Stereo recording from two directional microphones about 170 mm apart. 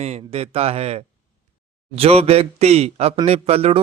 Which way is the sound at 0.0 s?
35° right (ahead or behind).